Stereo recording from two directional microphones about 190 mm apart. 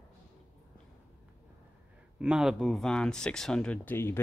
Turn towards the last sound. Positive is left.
turn(degrees=10)  # may be behind; listen again after turning